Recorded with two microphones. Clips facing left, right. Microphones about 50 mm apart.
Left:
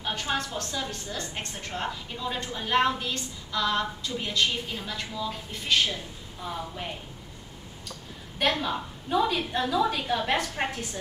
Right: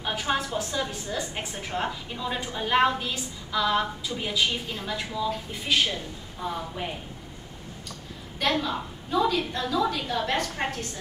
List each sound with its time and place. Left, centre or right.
0.0 s a woman's voice: centre
8.4 s a woman's voice: centre